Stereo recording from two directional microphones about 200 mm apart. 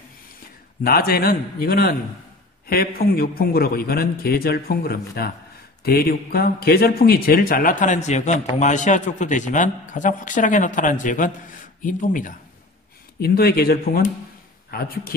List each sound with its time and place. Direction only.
0.8 s a man's voice: 50° left (ahead or behind)
13.2 s a man's voice: 50° left (ahead or behind)